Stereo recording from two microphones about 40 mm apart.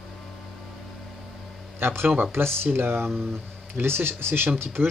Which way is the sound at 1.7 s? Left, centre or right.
Right.